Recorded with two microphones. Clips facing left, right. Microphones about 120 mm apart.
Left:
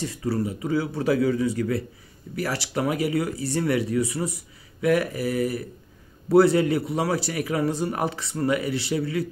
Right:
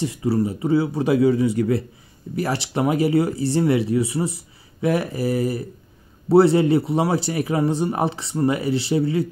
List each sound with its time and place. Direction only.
0.0 s a man's voice: 20° right (ahead or behind)